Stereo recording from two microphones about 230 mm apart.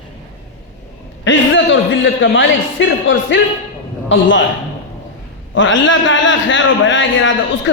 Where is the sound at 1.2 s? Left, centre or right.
Left.